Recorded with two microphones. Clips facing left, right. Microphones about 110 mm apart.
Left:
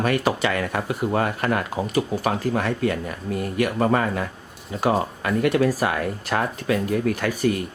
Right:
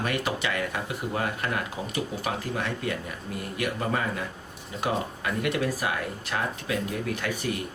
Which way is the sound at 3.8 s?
60° left (ahead or behind).